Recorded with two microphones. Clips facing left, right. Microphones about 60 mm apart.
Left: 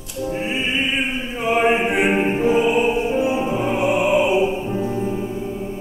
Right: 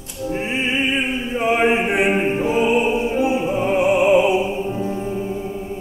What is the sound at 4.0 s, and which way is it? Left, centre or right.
Opera, right.